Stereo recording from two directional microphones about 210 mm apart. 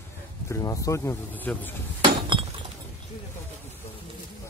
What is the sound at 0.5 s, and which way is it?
Speech, 15° left (ahead or behind).